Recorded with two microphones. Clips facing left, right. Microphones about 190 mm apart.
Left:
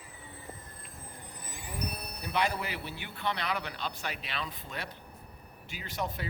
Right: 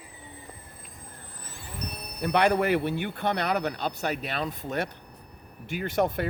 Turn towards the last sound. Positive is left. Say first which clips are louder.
# right 11 dB
turn(degrees=-55)  # may be behind; listen again after turning